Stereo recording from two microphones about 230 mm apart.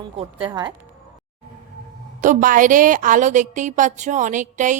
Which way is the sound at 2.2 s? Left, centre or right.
Right.